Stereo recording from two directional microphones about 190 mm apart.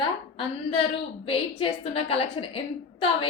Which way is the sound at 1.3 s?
30° left (ahead or behind).